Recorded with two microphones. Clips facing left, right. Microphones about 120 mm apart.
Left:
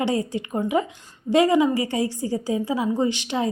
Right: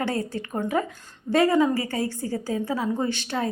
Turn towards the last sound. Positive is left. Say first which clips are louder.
# left 3 dB
turn(degrees=15)  # may be behind; listen again after turning